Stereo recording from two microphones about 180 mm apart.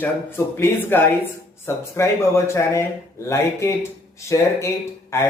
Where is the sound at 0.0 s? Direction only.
10° left (ahead or behind).